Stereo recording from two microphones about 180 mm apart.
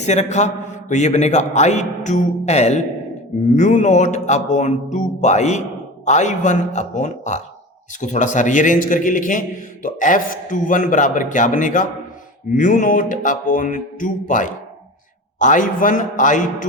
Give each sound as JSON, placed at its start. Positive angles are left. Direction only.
{"t": 0.0, "sound": "a man's voice", "side_deg": 40}